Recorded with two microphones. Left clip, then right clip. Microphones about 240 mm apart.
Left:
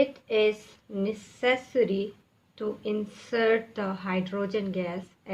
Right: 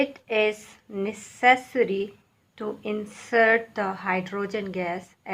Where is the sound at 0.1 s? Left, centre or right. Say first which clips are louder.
Right 1 dB; centre.